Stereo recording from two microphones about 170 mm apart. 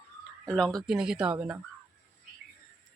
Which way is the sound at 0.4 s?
5° left (ahead or behind).